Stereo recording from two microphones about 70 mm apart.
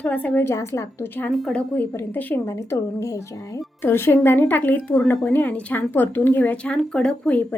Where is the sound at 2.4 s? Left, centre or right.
Left.